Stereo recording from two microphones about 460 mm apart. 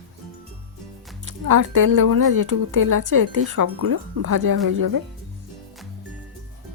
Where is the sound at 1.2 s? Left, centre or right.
Right.